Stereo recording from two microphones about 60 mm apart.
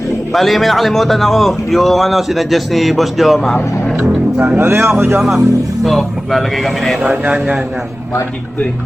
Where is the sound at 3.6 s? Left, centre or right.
Left.